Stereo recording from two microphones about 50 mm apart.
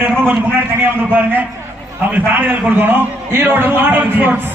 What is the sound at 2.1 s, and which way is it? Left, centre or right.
A man's voice, right.